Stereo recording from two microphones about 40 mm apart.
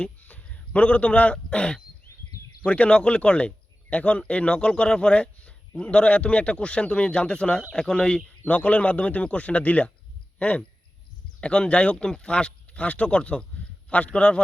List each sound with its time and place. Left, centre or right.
0.2 s a man's voice: left; by 8.2 s centre
8.4 s a man's voice: left